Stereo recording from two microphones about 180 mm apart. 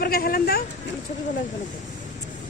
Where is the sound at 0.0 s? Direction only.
55° left (ahead or behind).